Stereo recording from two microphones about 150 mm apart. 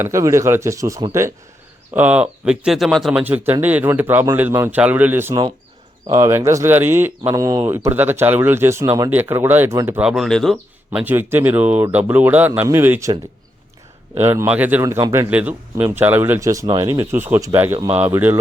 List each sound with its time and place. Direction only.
0.0 s speech: 20° right (ahead or behind)
1.9 s speech: 10° right (ahead or behind)
10.1 s speech: centre (ahead or behind)
11.0 s speech: 15° right (ahead or behind)
14.2 s speech: 15° right (ahead or behind)